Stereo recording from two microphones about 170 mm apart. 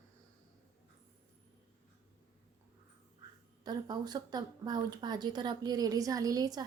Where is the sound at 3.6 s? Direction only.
25° right (ahead or behind).